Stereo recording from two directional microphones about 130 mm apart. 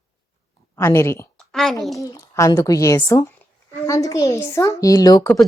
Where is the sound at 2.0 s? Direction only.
25° left (ahead or behind).